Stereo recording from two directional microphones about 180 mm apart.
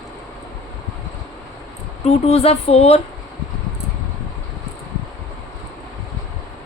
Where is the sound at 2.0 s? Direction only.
35° left (ahead or behind).